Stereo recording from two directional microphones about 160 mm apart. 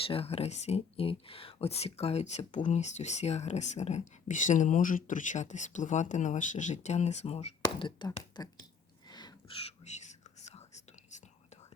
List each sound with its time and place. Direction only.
0.1 s speech: 40° left (ahead or behind)
7.6 s speech: 30° left (ahead or behind)
9.0 s a sound: 25° left (ahead or behind)
9.6 s whispering: 45° left (ahead or behind)